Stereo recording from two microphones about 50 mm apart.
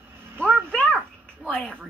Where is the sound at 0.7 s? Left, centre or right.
Centre.